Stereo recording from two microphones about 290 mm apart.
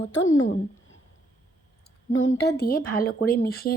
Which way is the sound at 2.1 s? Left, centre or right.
Left.